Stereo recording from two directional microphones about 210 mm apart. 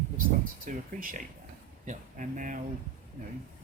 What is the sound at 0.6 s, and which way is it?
Speech, 40° right (ahead or behind).